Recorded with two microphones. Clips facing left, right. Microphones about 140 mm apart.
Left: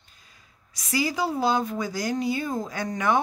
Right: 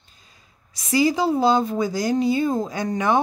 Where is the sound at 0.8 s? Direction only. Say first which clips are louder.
Right 7 dB; 25° right (ahead or behind).